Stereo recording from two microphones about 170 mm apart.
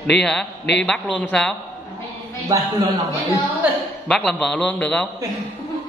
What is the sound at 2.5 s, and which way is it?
Speech, 20° right (ahead or behind).